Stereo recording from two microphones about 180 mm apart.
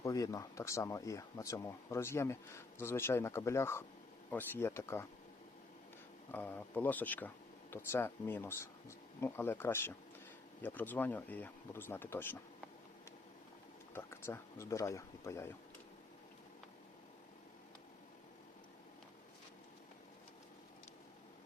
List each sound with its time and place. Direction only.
0.0 s speech: 20° left (ahead or behind)
6.3 s speech: 10° left (ahead or behind)
13.9 s speech: 15° left (ahead or behind)